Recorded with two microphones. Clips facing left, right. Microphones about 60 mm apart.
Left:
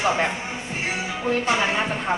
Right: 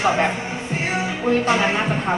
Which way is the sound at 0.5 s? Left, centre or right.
Right.